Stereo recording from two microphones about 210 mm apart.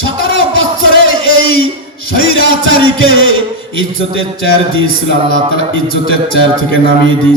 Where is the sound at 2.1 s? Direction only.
70° right (ahead or behind).